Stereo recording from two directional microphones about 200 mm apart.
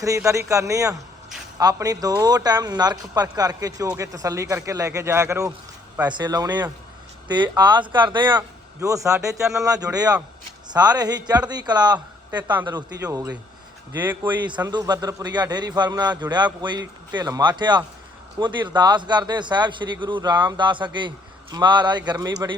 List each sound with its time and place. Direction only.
0.0 s a man's voice: 15° right (ahead or behind)